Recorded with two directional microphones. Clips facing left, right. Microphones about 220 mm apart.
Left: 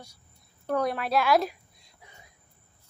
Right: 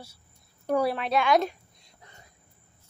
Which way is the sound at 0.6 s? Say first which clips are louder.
Right 2 dB; 10° right (ahead or behind).